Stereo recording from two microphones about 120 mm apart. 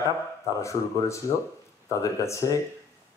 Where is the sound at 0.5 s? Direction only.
25° left (ahead or behind).